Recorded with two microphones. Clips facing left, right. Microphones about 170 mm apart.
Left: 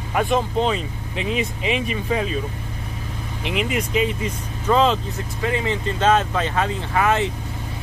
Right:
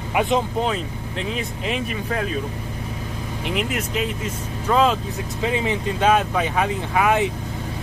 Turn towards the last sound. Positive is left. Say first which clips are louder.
# right 1 dB
turn(degrees=-10)  # may be behind; listen again after turning